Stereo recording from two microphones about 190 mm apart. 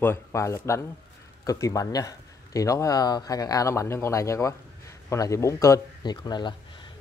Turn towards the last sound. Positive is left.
turn(degrees=20)  # may be behind; listen again after turning